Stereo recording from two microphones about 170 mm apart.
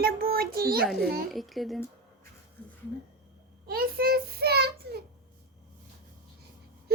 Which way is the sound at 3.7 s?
60° right (ahead or behind).